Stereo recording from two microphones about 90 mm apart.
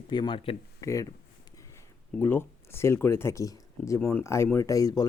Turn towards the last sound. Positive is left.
turn(degrees=40)  # may be behind; listen again after turning